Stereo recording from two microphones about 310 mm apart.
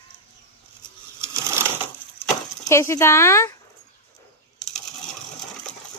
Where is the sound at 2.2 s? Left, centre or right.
Centre.